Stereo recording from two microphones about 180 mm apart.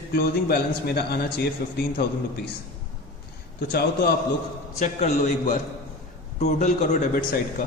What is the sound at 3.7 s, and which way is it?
Speech, 60° left (ahead or behind).